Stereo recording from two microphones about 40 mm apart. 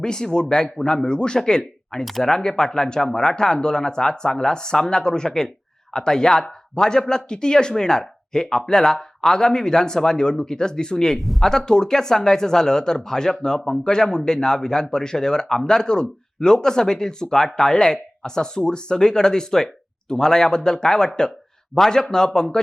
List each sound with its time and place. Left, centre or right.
0.0 s speech: centre
11.2 s speech: centre
11.4 s speech: centre